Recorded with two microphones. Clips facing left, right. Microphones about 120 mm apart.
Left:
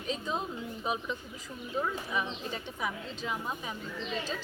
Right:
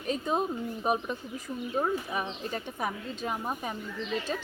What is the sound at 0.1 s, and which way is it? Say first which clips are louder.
A woman's voice: right 6 dB; 50° right (ahead or behind).